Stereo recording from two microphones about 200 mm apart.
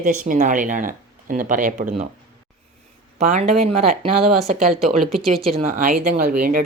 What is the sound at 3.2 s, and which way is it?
Speech, 35° right (ahead or behind).